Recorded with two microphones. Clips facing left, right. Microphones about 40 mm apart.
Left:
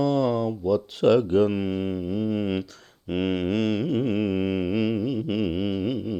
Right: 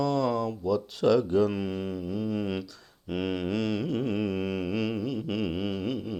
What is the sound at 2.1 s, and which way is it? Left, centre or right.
Mantra, left.